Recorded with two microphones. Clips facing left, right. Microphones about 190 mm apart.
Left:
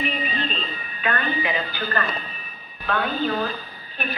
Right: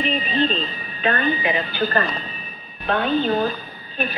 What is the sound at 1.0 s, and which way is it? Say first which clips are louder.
Speech: right 4 dB; 25° right (ahead or behind).